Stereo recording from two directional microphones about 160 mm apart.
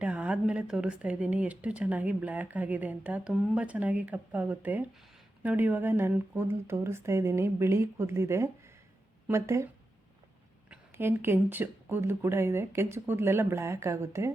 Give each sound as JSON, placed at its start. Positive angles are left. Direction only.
{"t": 0.0, "sound": "speech", "side_deg": -10}
{"t": 10.7, "sound": "speech", "side_deg": -15}